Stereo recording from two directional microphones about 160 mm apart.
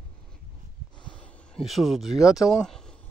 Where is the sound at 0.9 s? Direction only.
30° left (ahead or behind).